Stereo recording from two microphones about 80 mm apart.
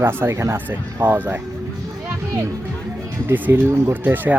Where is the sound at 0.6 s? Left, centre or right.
Right.